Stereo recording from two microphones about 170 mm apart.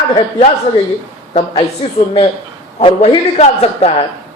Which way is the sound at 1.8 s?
30° left (ahead or behind).